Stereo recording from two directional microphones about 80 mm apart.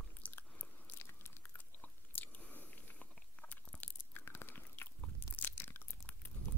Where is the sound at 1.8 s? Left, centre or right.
Left.